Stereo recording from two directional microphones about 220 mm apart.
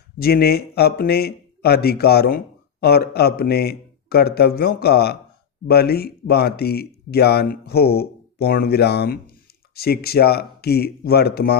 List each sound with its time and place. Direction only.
0.2 s speech: 45° left (ahead or behind)